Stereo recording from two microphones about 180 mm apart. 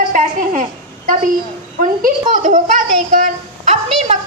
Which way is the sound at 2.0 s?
45° right (ahead or behind).